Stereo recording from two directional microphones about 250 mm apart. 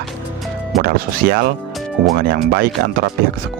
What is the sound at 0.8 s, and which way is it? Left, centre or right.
Speech, right.